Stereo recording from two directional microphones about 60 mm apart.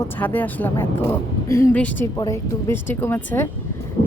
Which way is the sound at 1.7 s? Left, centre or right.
Left.